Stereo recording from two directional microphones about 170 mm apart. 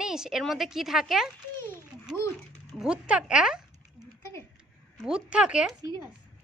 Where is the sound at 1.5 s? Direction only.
15° left (ahead or behind).